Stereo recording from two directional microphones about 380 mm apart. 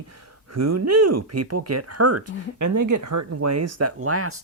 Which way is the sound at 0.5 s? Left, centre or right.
Right.